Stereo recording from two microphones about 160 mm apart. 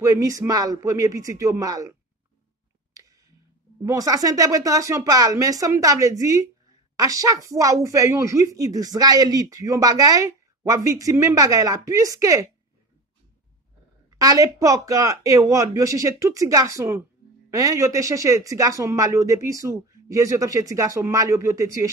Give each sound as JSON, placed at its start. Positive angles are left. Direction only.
{"t": 0.0, "sound": "speech", "side_deg": -20}
{"t": 3.8, "sound": "speech", "side_deg": -20}
{"t": 14.1, "sound": "speech", "side_deg": -20}